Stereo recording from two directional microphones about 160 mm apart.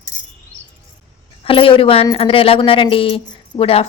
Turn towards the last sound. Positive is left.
turn(degrees=35)  # may be behind; listen again after turning